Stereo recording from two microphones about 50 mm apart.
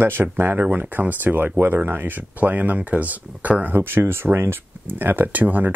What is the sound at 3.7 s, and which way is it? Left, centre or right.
Speech, right.